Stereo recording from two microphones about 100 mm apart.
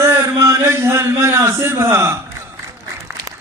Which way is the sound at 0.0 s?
30° right (ahead or behind).